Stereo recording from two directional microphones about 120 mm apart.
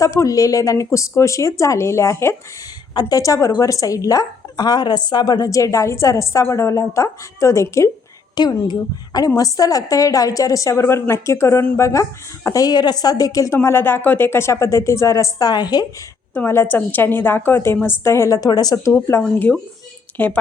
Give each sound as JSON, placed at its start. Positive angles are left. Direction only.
{"t": 0.0, "sound": "speech", "side_deg": 25}
{"t": 2.9, "sound": "speech", "side_deg": 35}
{"t": 8.4, "sound": "speech", "side_deg": 35}
{"t": 16.3, "sound": "a woman's voice", "side_deg": 20}
{"t": 19.2, "sound": "a woman's voice", "side_deg": 10}